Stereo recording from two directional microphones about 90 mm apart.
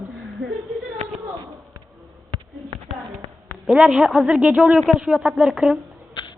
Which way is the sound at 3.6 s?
10° right (ahead or behind).